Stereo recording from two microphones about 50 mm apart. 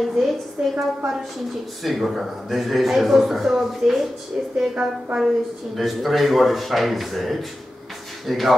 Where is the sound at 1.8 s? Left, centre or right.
Centre.